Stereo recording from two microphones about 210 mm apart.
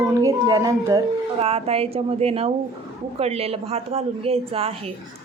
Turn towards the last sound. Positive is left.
turn(degrees=-30)  # may be behind; listen again after turning